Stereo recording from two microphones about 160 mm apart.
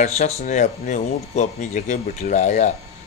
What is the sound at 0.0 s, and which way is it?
A man's voice, 45° left (ahead or behind).